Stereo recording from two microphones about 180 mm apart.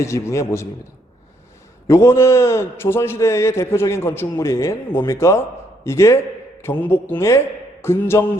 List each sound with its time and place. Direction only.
0.0 s a man's voice: 15° left (ahead or behind)
1.9 s a man's voice: 15° left (ahead or behind)